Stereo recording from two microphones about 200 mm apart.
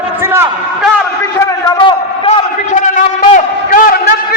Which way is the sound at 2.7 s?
40° left (ahead or behind).